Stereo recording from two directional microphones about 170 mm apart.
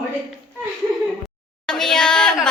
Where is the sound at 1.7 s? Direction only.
5° left (ahead or behind).